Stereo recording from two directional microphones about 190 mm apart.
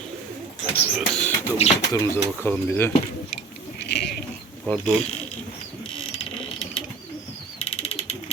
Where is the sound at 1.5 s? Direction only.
35° left (ahead or behind).